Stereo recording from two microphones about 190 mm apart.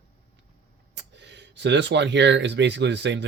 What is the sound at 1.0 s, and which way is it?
Speech, 70° right (ahead or behind).